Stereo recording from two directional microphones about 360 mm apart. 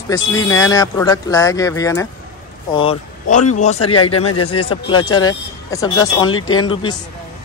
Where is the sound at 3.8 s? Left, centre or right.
Left.